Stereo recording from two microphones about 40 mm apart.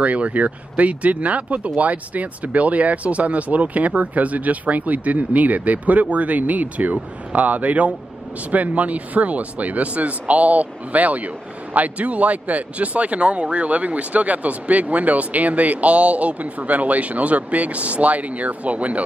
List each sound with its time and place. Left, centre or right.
0.0 s speech: right